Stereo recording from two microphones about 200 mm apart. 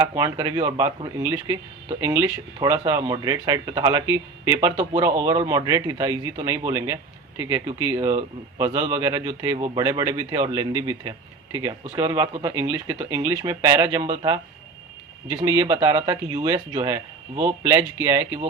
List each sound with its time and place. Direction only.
0.0 s speech: 15° right (ahead or behind)